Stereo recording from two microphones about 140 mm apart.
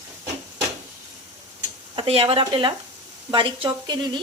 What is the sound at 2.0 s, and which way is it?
Speech, 40° right (ahead or behind).